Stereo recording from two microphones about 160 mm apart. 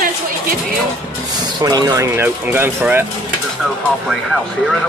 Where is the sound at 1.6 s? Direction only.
25° right (ahead or behind).